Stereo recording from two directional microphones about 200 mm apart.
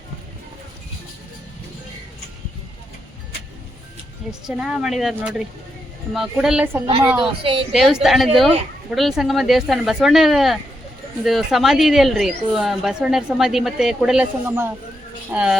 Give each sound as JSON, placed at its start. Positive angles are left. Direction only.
{"t": 4.3, "sound": "a woman's voice", "side_deg": -5}
{"t": 7.4, "sound": "a woman's voice", "side_deg": -25}
{"t": 7.7, "sound": "a woman's voice", "side_deg": 0}